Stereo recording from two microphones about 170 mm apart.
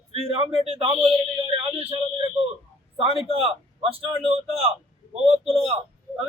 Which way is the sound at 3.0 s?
35° right (ahead or behind).